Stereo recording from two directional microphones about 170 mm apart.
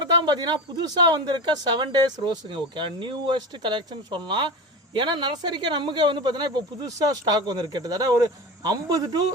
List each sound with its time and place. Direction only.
0.0 s speech: 25° right (ahead or behind)